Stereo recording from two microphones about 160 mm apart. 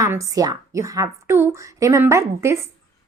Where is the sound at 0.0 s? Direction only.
20° right (ahead or behind).